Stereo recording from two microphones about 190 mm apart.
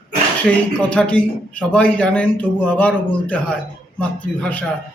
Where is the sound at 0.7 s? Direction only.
5° left (ahead or behind).